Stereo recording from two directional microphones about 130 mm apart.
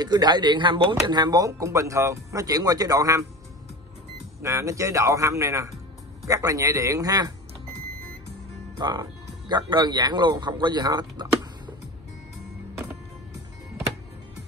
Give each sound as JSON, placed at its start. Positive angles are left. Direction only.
{"t": 0.0, "sound": "speech", "side_deg": -30}
{"t": 4.4, "sound": "speech", "side_deg": -20}
{"t": 8.7, "sound": "speech", "side_deg": -35}